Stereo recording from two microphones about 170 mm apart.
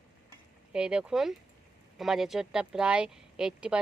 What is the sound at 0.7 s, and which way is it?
Speech, 5° right (ahead or behind).